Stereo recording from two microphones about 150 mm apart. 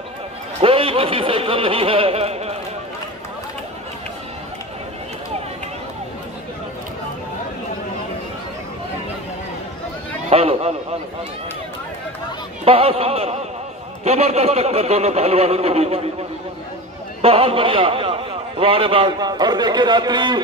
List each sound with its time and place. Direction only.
0.6 s a man's voice: 35° right (ahead or behind)
10.3 s a sound: 40° right (ahead or behind)
12.6 s a man's voice: 40° right (ahead or behind)
17.2 s a man's voice: 40° right (ahead or behind)